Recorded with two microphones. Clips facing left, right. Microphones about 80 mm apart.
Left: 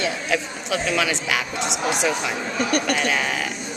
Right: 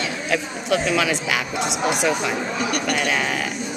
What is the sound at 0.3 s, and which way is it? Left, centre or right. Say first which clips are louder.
Speech: right 2 dB; centre.